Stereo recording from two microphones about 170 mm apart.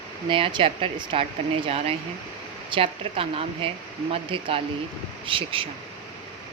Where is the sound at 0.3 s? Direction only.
30° right (ahead or behind).